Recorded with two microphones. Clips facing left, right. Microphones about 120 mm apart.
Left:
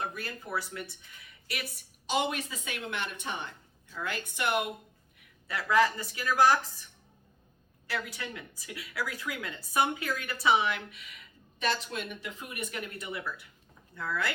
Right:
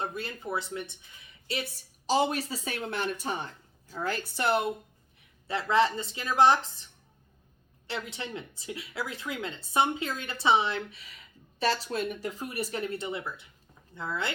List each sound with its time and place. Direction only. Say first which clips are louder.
0.0 s a woman's voice: right 3 dB; 25° right (ahead or behind)
7.9 s a woman's voice: right 1 dB; 25° right (ahead or behind)